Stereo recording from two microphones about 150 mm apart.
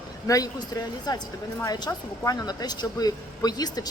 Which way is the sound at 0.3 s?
25° left (ahead or behind).